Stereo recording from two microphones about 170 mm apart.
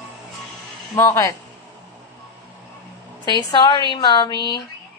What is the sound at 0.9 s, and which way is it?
Speech, 20° left (ahead or behind).